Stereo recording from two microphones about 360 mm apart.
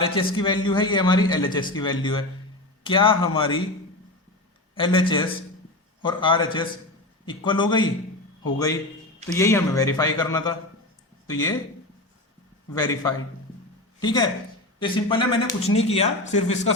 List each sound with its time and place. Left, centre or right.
0.0 s speech: centre
4.7 s speech: centre
12.7 s speech: centre